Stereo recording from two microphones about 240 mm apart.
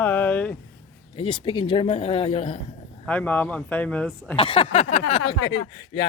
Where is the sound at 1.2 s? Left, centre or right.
Left.